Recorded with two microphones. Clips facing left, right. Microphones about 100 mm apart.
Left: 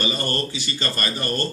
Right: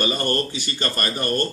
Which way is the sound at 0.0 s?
55° right (ahead or behind).